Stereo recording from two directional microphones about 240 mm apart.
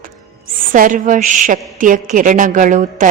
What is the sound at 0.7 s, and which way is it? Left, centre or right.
Speech, right.